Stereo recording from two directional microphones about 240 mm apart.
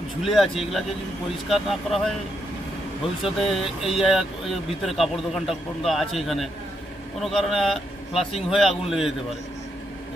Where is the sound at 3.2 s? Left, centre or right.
Centre.